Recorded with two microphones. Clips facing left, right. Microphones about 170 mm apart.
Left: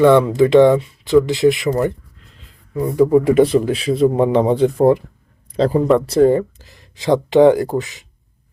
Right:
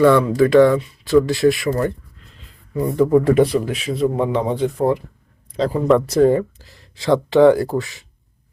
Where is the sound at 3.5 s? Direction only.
30° left (ahead or behind).